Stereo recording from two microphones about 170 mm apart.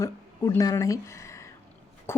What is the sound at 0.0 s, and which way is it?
Speech, 20° left (ahead or behind).